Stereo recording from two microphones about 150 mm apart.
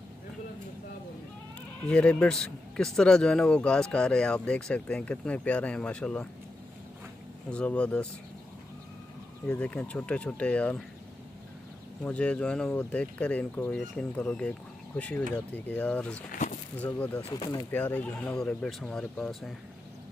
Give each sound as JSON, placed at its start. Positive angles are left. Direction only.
{"t": 1.9, "sound": "a man's voice", "side_deg": 5}
{"t": 7.4, "sound": "a man's voice", "side_deg": 5}
{"t": 9.5, "sound": "a man's voice", "side_deg": 10}
{"t": 12.0, "sound": "a man's voice", "side_deg": 10}
{"t": 16.3, "sound": "speech", "side_deg": 55}
{"t": 16.8, "sound": "a man's voice", "side_deg": 10}
{"t": 17.3, "sound": "speech", "side_deg": 30}
{"t": 17.6, "sound": "speech", "side_deg": 10}